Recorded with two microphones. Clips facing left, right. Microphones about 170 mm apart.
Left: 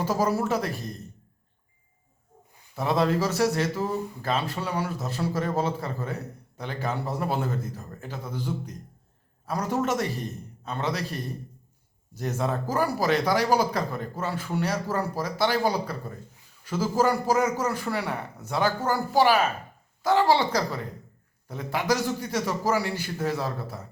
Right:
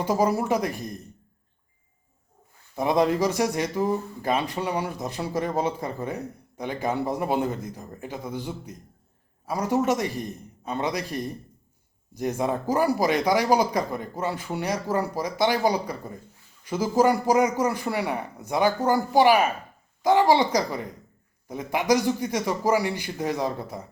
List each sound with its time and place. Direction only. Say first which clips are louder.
0.0 s speech: right 2 dB; 15° right (ahead or behind)
2.7 s speech: right 2 dB; 15° right (ahead or behind)